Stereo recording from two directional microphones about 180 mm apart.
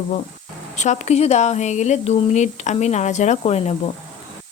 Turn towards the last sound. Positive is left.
turn(degrees=35)  # may be behind; listen again after turning